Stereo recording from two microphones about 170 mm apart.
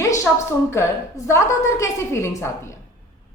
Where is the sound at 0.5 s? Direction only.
15° left (ahead or behind).